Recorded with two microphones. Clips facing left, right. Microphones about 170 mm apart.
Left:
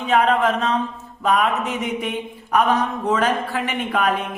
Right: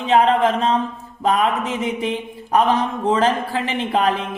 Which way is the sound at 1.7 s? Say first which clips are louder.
Right 2 dB; 30° right (ahead or behind).